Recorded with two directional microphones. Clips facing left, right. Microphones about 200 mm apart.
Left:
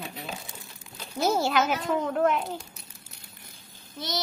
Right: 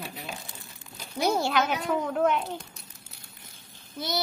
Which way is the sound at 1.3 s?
5° left (ahead or behind).